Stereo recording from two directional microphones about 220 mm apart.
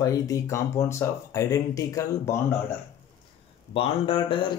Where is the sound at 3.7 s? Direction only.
25° left (ahead or behind).